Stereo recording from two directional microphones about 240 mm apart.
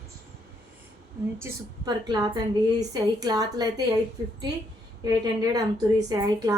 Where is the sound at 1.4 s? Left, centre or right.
Centre.